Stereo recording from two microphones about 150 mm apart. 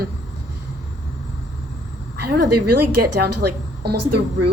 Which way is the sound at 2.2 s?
90° right.